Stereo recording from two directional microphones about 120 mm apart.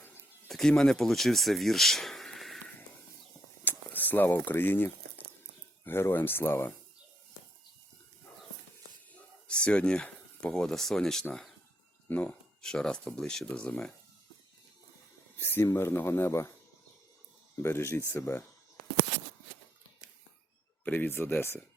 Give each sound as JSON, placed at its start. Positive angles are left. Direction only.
{"t": 0.4, "sound": "speech", "side_deg": 5}
{"t": 3.6, "sound": "a sound", "side_deg": 15}
{"t": 5.8, "sound": "speech", "side_deg": 20}
{"t": 9.5, "sound": "speech", "side_deg": 10}
{"t": 15.4, "sound": "speech", "side_deg": 20}
{"t": 17.6, "sound": "speech", "side_deg": 20}
{"t": 20.8, "sound": "speech", "side_deg": 15}